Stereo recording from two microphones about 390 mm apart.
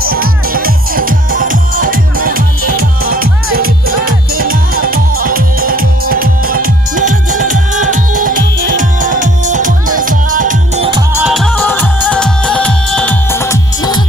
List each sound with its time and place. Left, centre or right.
0.0 s music: right; by 14.0 s centre